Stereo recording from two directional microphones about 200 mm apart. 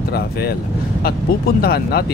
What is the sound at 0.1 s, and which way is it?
Speech, 50° left (ahead or behind).